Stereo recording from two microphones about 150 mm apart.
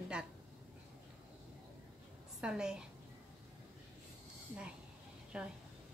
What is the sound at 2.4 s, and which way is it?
Speech, 5° right (ahead or behind).